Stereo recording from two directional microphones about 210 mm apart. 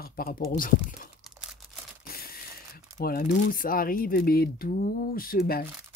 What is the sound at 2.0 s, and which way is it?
Mechanisms, 45° left (ahead or behind).